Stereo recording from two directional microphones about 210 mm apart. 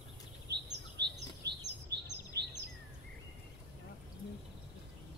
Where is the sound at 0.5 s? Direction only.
55° right (ahead or behind).